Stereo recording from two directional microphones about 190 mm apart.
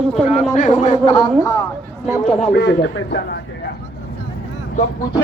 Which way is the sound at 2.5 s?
65° left (ahead or behind).